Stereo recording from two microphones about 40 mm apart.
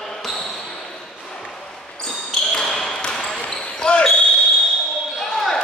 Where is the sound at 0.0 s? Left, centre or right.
Centre.